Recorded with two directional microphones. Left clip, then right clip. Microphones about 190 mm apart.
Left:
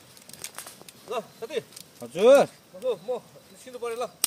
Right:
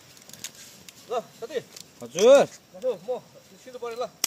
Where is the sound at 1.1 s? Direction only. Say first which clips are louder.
Right 1 dB; 65° left (ahead or behind).